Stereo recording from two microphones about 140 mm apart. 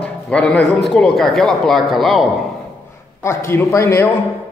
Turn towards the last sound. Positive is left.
turn(degrees=20)  # may be behind; listen again after turning